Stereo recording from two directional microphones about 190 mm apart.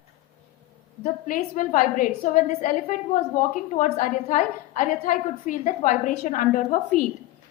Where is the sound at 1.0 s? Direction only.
40° left (ahead or behind).